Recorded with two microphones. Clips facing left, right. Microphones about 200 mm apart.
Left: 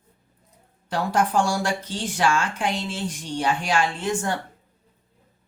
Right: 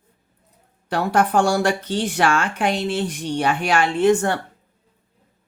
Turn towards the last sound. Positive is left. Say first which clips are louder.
# right 9 dB
turn(degrees=-65)  # may be behind; listen again after turning